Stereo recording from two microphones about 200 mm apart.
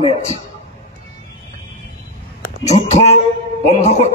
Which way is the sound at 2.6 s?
35° left (ahead or behind).